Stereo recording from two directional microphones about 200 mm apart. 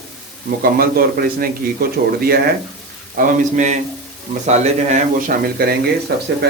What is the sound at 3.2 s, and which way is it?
Speech, 40° right (ahead or behind).